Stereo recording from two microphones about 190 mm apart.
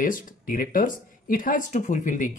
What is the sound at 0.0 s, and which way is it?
Speech, 45° left (ahead or behind).